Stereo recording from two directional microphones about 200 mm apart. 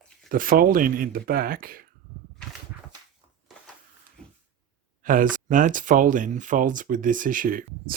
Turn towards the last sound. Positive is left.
turn(degrees=-45)  # may be behind; listen again after turning